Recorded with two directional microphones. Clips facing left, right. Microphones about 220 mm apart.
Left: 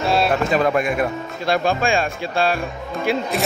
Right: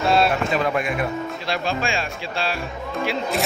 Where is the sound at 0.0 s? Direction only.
Centre (ahead or behind).